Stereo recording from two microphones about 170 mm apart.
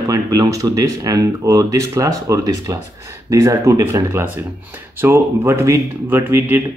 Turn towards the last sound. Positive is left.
turn(degrees=-15)  # may be behind; listen again after turning